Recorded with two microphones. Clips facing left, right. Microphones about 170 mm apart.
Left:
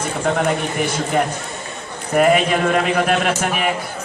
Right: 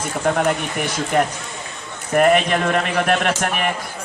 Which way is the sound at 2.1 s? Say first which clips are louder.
Left 1 dB; 5° left (ahead or behind).